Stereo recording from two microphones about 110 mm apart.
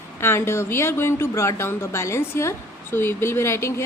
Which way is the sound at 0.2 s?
25° left (ahead or behind).